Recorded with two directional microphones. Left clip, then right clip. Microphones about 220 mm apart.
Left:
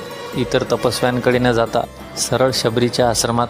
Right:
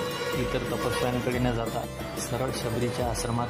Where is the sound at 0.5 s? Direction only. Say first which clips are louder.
Left 11 dB; 25° left (ahead or behind).